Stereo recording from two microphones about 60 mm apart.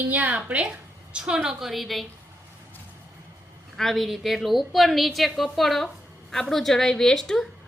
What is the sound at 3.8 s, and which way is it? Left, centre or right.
A woman's voice, centre.